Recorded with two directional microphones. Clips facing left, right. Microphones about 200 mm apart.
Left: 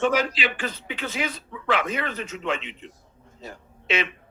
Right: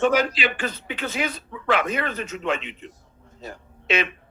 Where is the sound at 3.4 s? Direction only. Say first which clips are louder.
Right 2 dB; 45° right (ahead or behind).